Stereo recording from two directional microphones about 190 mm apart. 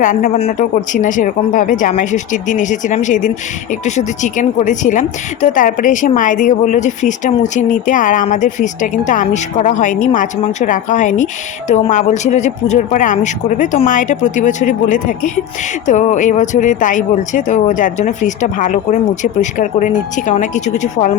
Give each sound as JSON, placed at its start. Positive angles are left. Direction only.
{"t": 0.0, "sound": "speech", "side_deg": 45}